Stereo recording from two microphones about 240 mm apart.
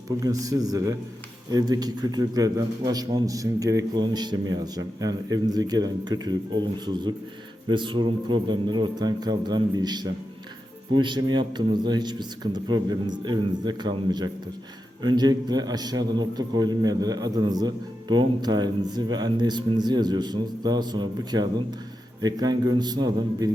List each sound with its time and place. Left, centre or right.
0.2 s a man's voice: centre